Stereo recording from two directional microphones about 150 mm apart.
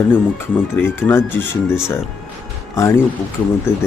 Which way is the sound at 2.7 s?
20° left (ahead or behind).